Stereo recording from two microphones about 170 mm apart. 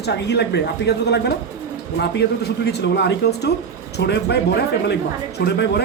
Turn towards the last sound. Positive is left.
turn(degrees=80)